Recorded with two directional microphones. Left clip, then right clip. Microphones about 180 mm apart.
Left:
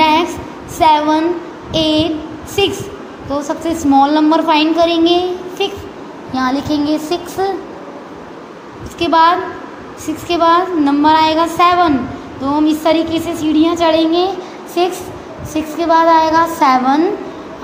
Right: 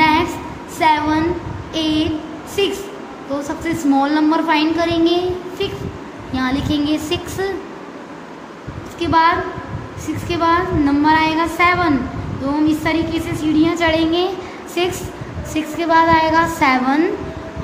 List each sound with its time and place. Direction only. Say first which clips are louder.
0.0 s child singing: left 3 dB; 20° left (ahead or behind)
0.7 s a woman's voice: left 4 dB; 20° left (ahead or behind)
9.0 s a woman's voice: left 4 dB; 20° left (ahead or behind)